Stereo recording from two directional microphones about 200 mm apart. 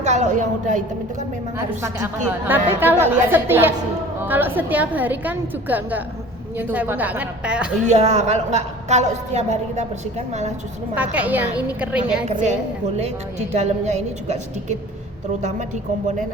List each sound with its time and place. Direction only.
0.0 s a woman's voice: 35° right (ahead or behind)
1.5 s a woman's voice: 15° right (ahead or behind)
7.9 s a woman's voice: 35° right (ahead or behind)
10.9 s a woman's voice: 10° right (ahead or behind)
12.2 s a woman's voice: 35° right (ahead or behind)